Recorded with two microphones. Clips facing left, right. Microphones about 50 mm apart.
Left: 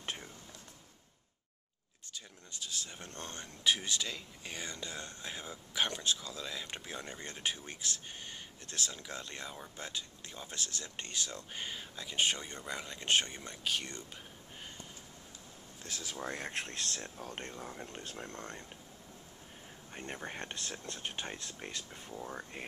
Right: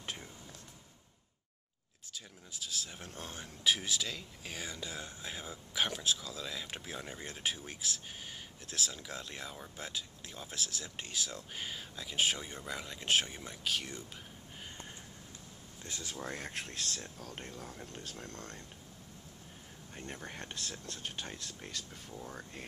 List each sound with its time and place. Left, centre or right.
2.1 s speech: centre
15.8 s speech: centre
16.5 s speech: left
17.5 s speech: centre
17.8 s speech: left
19.9 s speech: left